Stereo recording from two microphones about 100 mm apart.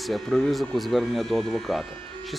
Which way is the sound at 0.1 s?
Centre (ahead or behind).